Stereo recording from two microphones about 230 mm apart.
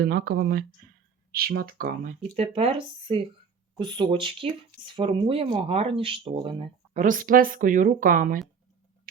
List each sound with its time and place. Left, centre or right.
0.0 s speech: right
2.3 s speech: right